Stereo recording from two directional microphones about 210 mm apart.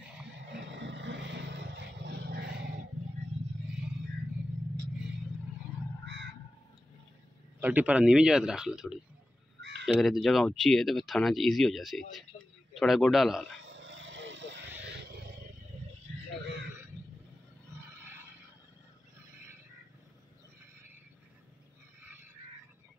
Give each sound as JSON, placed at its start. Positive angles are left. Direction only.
{"t": 0.7, "sound": "vehicle", "side_deg": -60}
{"t": 6.0, "sound": "a sound", "side_deg": -55}
{"t": 7.6, "sound": "speech", "side_deg": -10}
{"t": 13.7, "sound": "vehicle", "side_deg": -60}